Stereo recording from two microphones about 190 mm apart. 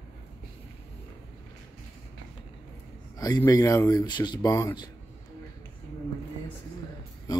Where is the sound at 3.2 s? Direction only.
20° left (ahead or behind).